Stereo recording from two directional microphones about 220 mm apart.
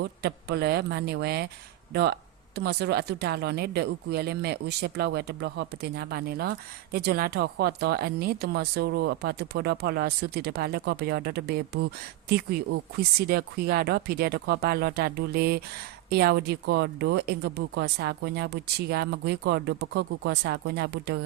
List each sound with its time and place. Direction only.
0.0 s speech: 45° right (ahead or behind)